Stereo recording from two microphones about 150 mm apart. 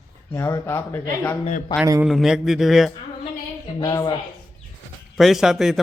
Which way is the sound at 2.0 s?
Centre (ahead or behind).